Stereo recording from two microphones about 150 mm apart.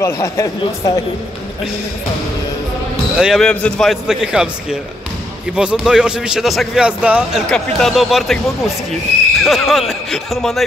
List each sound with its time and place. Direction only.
0.0 s speech: 20° left (ahead or behind)
3.2 s a man's voice: 5° right (ahead or behind)
3.4 s a man's voice: 5° left (ahead or behind)
7.4 s a man's voice: 5° left (ahead or behind)
9.4 s a man's voice: centre (ahead or behind)